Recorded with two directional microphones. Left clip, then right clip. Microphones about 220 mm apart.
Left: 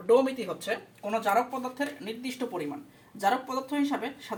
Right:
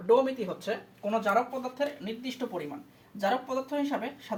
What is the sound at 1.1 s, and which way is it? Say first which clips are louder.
Speech: left 1 dB; 20° right (ahead or behind).